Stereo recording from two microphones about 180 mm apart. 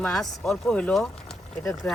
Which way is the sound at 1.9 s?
15° left (ahead or behind).